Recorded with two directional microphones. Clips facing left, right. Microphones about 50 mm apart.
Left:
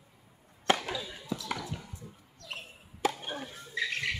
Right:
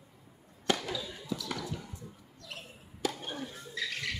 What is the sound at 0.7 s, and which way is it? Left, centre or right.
Basketball bounce, left.